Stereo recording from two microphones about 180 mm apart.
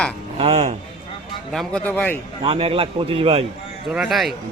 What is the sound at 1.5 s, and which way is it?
Speech, 5° left (ahead or behind).